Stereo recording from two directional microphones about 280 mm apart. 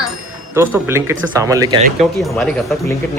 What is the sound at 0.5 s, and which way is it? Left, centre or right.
Speech, centre.